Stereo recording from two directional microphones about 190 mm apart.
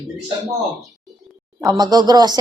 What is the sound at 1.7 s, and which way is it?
Speech, 20° right (ahead or behind).